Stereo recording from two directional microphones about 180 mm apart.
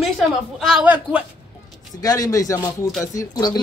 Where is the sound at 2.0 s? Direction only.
20° left (ahead or behind).